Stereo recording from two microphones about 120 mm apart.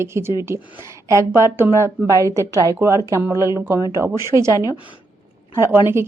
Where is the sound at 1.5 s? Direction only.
20° right (ahead or behind).